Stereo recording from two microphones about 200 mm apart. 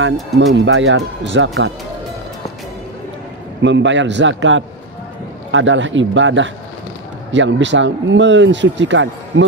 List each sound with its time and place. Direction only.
0.0 s speech: 75° right (ahead or behind)
3.6 s speech: 65° right (ahead or behind)